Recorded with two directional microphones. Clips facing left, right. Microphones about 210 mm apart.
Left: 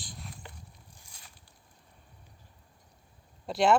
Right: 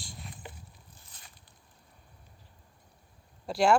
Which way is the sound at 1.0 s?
10° left (ahead or behind).